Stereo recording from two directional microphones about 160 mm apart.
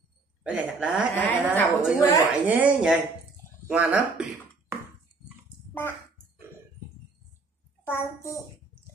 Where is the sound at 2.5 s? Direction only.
5° right (ahead or behind).